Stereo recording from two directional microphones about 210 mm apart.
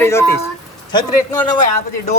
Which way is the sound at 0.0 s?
10° left (ahead or behind).